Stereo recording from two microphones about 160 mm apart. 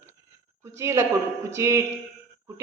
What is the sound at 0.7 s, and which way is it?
A man's voice, 15° right (ahead or behind).